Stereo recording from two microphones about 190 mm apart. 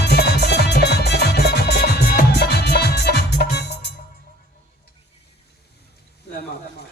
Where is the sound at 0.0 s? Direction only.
60° left (ahead or behind).